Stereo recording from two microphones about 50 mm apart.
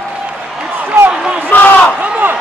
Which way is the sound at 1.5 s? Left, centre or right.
Left.